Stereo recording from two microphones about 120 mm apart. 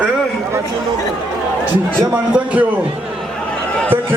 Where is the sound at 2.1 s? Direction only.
10° right (ahead or behind).